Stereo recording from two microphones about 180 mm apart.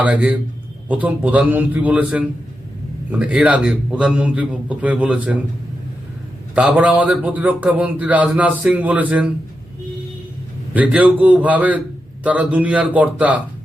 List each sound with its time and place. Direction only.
0.0 s speech: 5° right (ahead or behind)
6.5 s speech: 5° right (ahead or behind)
10.8 s speech: 10° right (ahead or behind)